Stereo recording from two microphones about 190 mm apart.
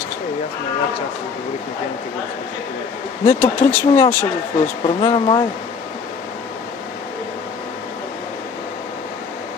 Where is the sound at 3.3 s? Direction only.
10° left (ahead or behind).